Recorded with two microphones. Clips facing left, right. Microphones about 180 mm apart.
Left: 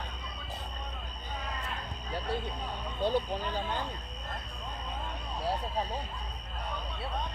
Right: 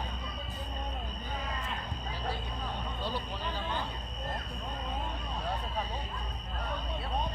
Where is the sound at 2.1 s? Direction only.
60° left (ahead or behind).